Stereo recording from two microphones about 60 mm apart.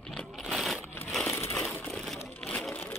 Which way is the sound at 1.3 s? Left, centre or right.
Left.